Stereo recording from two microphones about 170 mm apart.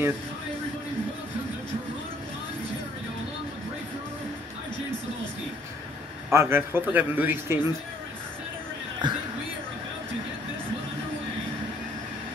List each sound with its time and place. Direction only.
6.3 s a man's voice: 15° right (ahead or behind)
9.0 s speech: 25° right (ahead or behind)